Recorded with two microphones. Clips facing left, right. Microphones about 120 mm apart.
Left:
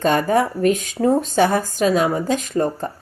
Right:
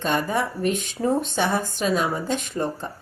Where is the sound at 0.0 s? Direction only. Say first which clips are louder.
Left 6 dB; 45° left (ahead or behind).